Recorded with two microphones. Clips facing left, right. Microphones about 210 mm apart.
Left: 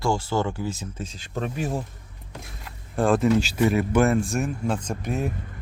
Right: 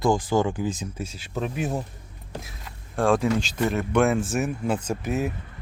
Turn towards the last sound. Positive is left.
turn(degrees=-5)  # may be behind; listen again after turning